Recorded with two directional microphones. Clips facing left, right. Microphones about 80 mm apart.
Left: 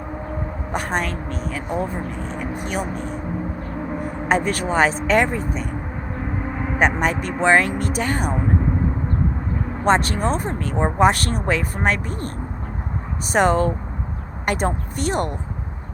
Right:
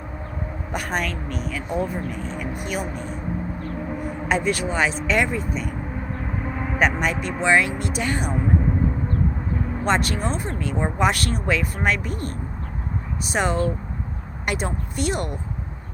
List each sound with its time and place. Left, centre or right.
0.7 s a woman's voice: left
4.3 s a woman's voice: left
6.7 s a woman's voice: left
9.8 s a woman's voice: left
13.3 s a woman's voice: left